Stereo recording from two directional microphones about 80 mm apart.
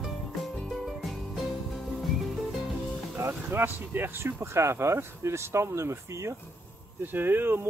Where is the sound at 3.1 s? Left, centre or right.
Right.